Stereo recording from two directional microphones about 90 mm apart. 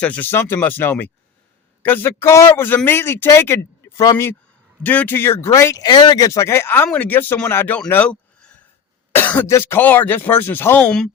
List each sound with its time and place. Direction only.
0.0 s speech: 15° left (ahead or behind)
0.3 s a man's voice: 25° left (ahead or behind)
3.9 s speech: 45° left (ahead or behind)
4.8 s a man's voice: 20° left (ahead or behind); by 5.8 s 35° left (ahead or behind)
5.8 s a man's voice: 50° left (ahead or behind); by 7.8 s 20° left (ahead or behind)
7.9 s a sound: 15° left (ahead or behind)
9.1 s cough: 20° left (ahead or behind)
9.5 s a man's voice: 25° left (ahead or behind)